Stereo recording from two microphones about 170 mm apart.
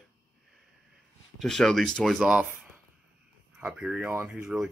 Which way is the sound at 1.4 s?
Centre (ahead or behind).